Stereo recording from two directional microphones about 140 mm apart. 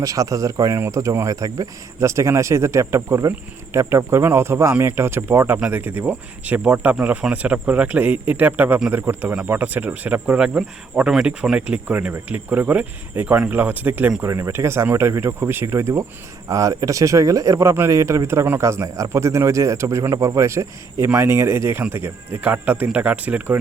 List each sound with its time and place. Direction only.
0.0 s speech: 25° right (ahead or behind)